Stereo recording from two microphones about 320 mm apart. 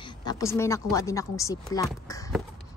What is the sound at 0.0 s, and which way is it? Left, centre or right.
Speech, centre.